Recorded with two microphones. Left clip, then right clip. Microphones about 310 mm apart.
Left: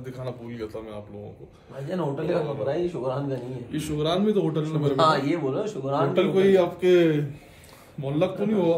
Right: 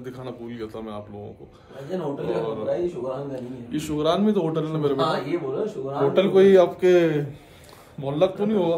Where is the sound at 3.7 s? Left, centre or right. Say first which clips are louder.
Right 3 dB; centre.